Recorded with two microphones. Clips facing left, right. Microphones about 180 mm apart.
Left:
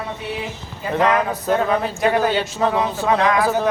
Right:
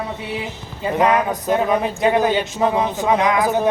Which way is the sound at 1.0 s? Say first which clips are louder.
Right 1 dB; 15° right (ahead or behind).